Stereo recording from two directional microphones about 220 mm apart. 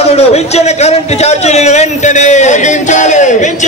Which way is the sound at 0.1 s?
30° left (ahead or behind).